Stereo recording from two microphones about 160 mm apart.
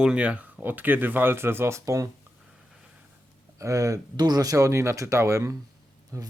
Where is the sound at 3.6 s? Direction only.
20° right (ahead or behind).